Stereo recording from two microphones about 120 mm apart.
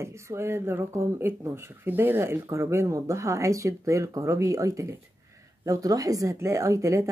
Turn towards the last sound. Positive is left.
turn(degrees=-25)  # may be behind; listen again after turning